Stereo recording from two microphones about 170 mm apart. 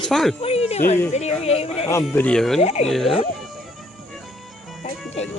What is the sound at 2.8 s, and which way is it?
Speech, centre (ahead or behind).